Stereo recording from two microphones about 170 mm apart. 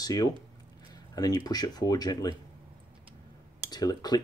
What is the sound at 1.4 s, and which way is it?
Speech, 25° left (ahead or behind).